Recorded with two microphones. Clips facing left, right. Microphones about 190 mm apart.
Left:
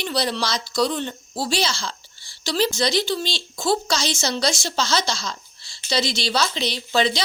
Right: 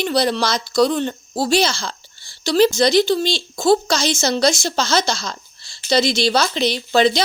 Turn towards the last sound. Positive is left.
turn(degrees=-50)  # may be behind; listen again after turning